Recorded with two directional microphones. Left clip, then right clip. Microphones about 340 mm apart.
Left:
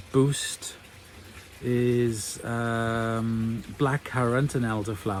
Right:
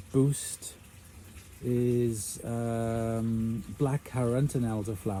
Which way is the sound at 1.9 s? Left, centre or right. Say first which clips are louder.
Left 4 dB; left.